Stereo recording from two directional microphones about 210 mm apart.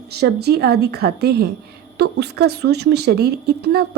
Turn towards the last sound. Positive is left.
turn(degrees=-50)  # may be behind; listen again after turning